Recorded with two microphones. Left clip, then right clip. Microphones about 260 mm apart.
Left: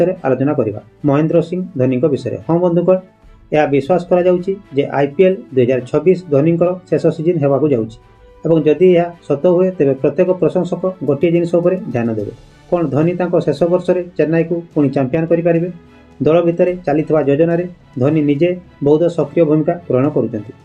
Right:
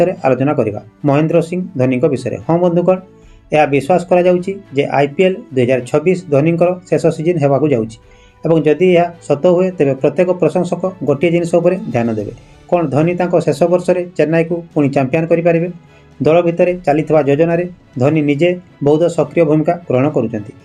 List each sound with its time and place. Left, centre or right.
0.0 s speech: right